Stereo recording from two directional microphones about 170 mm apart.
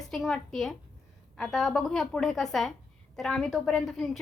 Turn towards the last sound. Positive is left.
turn(degrees=0)  # may be behind; listen again after turning